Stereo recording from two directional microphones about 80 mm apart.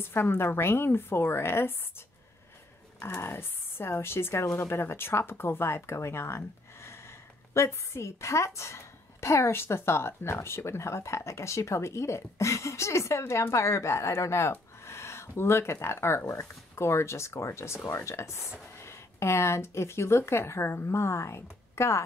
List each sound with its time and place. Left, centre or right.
0.0 s a woman's voice: left
3.2 s speech: left